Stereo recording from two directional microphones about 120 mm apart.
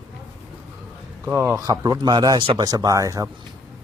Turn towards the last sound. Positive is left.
turn(degrees=-25)  # may be behind; listen again after turning